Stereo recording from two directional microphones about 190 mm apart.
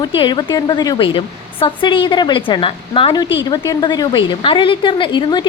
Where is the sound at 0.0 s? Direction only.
25° left (ahead or behind).